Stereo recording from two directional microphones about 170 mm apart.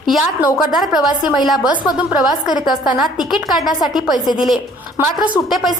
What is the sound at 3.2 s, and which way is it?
Speech, centre (ahead or behind).